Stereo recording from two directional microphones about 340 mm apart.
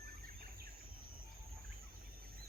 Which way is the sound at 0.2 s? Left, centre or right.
Right.